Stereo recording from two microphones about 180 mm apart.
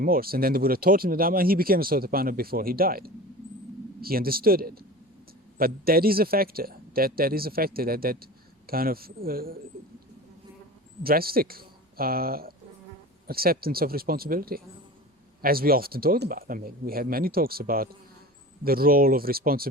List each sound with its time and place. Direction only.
0.0 s speech: 55° right (ahead or behind)
11.0 s speech: 55° right (ahead or behind)